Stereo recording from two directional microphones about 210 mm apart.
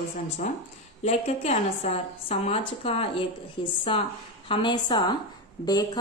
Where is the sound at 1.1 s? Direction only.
30° left (ahead or behind).